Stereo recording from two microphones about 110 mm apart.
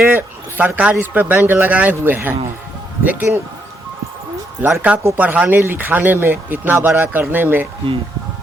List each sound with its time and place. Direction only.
0.0 s speech: 15° right (ahead or behind)
4.6 s speech: 15° right (ahead or behind)